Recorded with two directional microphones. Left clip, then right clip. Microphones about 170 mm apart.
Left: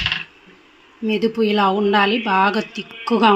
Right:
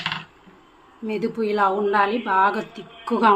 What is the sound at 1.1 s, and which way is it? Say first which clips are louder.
Speech: left 5 dB; 40° left (ahead or behind).